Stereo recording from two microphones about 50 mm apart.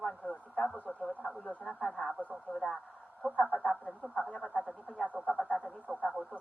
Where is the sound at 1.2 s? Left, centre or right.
Centre.